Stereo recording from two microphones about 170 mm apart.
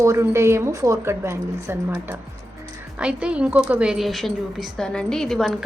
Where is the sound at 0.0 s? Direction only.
15° right (ahead or behind).